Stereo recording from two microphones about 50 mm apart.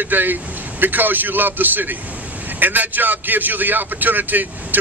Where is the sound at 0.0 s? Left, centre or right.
Right.